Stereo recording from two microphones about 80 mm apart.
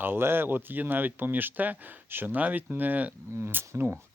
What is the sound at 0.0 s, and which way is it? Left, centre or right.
Speech, right.